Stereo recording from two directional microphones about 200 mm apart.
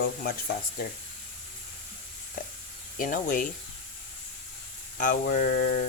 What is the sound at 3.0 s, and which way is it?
Speech, 45° left (ahead or behind).